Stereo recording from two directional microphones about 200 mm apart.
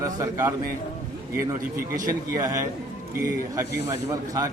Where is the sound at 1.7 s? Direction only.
45° right (ahead or behind).